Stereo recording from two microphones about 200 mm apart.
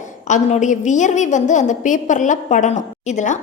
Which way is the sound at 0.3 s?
35° left (ahead or behind).